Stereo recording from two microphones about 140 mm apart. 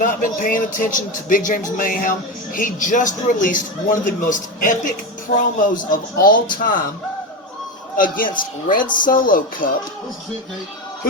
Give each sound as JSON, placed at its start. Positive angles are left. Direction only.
{"t": 0.0, "sound": "a man's voice", "side_deg": 75}
{"t": 7.9, "sound": "a man's voice", "side_deg": 80}